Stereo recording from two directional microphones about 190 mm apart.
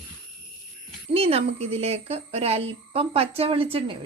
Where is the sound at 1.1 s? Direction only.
30° right (ahead or behind).